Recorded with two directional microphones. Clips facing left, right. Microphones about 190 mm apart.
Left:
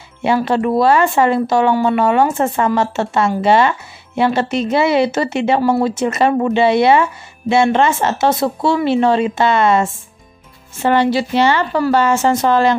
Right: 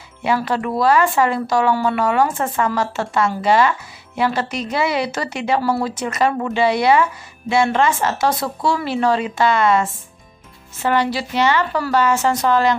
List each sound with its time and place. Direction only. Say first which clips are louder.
0.2 s speech: left 5 dB; 25° left (ahead or behind)